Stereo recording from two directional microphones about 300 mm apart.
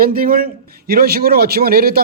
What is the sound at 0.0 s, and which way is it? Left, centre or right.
A man's voice, right.